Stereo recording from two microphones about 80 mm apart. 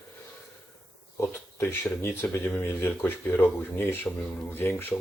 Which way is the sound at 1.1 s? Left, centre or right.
Left.